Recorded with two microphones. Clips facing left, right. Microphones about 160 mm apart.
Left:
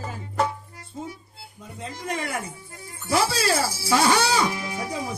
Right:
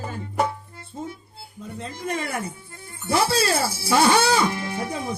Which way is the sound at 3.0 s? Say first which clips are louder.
Right 1 dB; 55° right (ahead or behind).